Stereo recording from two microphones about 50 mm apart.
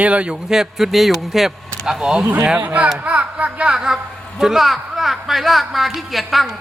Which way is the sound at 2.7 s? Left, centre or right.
Right.